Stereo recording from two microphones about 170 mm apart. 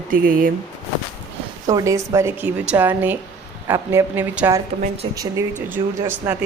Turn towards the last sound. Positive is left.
turn(degrees=-15)  # may be behind; listen again after turning